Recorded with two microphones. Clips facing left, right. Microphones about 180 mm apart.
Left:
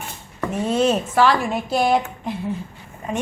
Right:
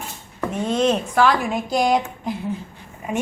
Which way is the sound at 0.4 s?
5° left (ahead or behind).